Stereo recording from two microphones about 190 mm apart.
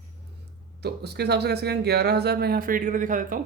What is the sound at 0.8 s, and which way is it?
Speech, 60° right (ahead or behind).